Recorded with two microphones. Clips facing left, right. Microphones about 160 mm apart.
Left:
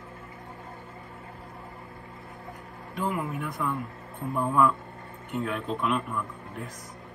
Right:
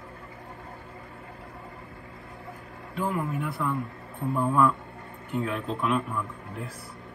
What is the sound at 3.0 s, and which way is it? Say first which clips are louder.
Speech: right 1 dB; centre (ahead or behind).